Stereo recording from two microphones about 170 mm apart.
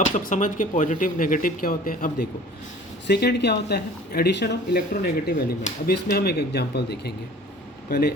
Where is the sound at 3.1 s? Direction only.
75° left (ahead or behind).